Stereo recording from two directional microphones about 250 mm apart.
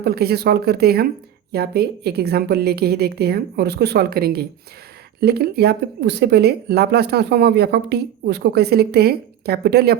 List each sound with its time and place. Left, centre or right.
0.0 s speech: right